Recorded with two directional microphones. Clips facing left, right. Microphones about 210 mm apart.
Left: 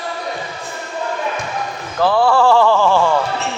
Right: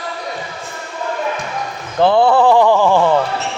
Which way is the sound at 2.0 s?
20° right (ahead or behind).